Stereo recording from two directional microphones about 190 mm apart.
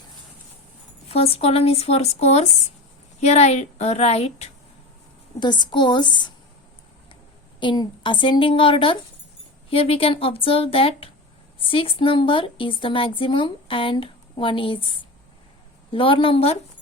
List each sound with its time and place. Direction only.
1.0 s speech: 30° left (ahead or behind)
5.4 s a woman's voice: 25° left (ahead or behind)
7.6 s a woman's voice: 25° left (ahead or behind)